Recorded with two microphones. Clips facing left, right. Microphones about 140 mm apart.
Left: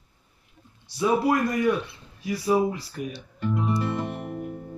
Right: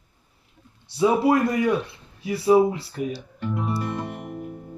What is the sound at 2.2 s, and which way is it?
Speech, 30° right (ahead or behind).